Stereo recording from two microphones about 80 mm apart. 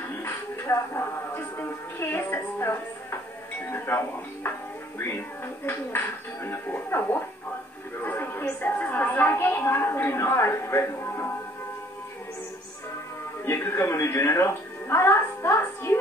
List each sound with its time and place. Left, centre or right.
0.1 s a woman's voice: left
13.5 s speech: left